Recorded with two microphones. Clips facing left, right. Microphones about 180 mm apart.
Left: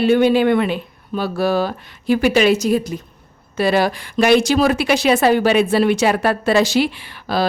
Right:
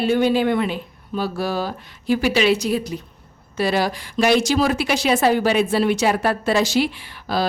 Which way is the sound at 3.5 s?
60° left (ahead or behind).